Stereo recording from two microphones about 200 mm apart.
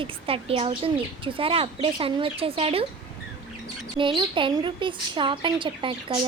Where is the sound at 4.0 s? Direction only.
25° right (ahead or behind).